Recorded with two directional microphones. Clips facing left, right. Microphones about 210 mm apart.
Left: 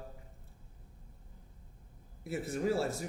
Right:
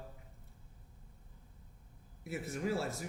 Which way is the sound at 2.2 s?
35° left (ahead or behind).